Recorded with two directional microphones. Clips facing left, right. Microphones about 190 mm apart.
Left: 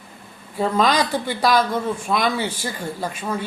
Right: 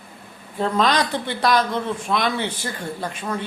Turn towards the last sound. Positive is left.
turn(degrees=10)  # may be behind; listen again after turning